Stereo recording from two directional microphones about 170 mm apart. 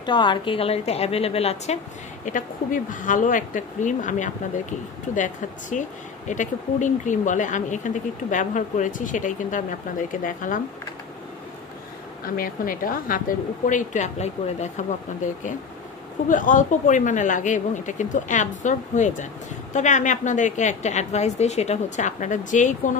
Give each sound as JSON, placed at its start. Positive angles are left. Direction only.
{"t": 0.0, "sound": "a woman's voice", "side_deg": 25}
{"t": 2.2, "sound": "speech", "side_deg": 50}
{"t": 12.4, "sound": "speech", "side_deg": 55}